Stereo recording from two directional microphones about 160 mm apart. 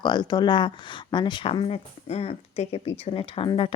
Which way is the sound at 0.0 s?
25° left (ahead or behind).